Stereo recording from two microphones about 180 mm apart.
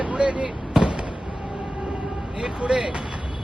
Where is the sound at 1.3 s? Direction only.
25° left (ahead or behind).